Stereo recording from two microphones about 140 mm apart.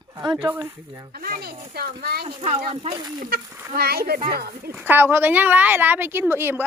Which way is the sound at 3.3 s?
90° right.